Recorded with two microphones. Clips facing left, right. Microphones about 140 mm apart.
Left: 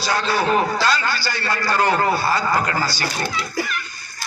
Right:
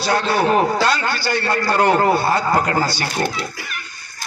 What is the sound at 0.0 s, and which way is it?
A man's voice, 55° right (ahead or behind).